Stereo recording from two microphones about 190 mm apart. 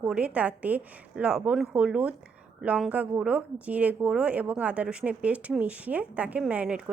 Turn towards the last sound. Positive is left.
turn(degrees=-5)  # may be behind; listen again after turning